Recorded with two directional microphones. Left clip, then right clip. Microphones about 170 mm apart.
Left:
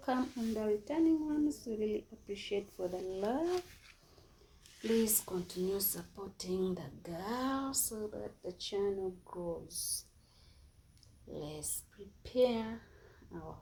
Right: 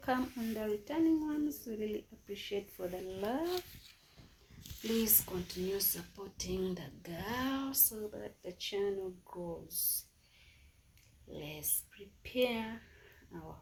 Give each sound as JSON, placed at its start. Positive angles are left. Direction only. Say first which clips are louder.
{"t": 0.0, "sound": "speech", "louder": "right 1 dB", "side_deg": -5}
{"t": 0.3, "sound": "speech", "louder": "left 2 dB", "side_deg": -20}
{"t": 0.6, "sound": "speech", "louder": "left 1 dB", "side_deg": -5}
{"t": 4.8, "sound": "speech", "louder": "left 2 dB", "side_deg": 0}
{"t": 11.3, "sound": "speech", "louder": "even", "side_deg": 0}